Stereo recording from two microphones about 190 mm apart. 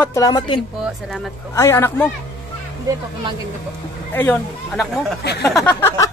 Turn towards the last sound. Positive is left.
turn(degrees=15)  # may be behind; listen again after turning